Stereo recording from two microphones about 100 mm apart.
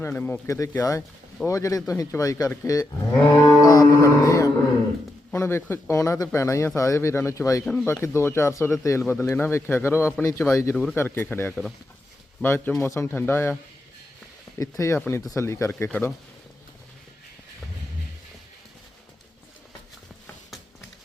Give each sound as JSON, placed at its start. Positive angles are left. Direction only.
{"t": 0.0, "sound": "speech", "side_deg": 20}
{"t": 7.6, "sound": "speech", "side_deg": 5}
{"t": 8.0, "sound": "speech", "side_deg": 25}
{"t": 14.6, "sound": "speech", "side_deg": 35}
{"t": 14.9, "sound": "speech", "side_deg": 20}